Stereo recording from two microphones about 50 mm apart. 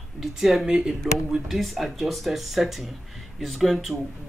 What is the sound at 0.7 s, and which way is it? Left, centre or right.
Speech, centre.